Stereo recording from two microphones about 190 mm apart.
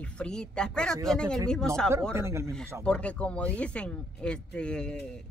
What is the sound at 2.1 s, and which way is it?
Speech, 15° right (ahead or behind).